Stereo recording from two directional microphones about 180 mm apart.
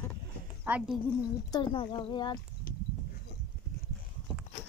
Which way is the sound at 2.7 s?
50° left (ahead or behind).